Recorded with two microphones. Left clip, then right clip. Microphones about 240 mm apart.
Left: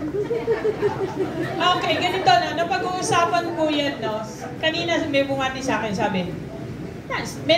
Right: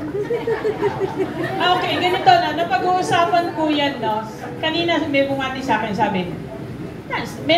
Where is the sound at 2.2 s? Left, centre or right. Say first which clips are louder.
Right 4 dB; left.